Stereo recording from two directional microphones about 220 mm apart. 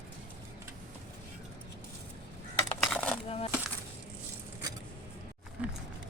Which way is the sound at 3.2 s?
25° left (ahead or behind).